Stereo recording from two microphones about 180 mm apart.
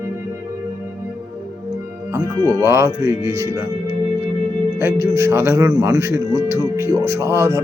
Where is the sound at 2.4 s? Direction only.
15° left (ahead or behind).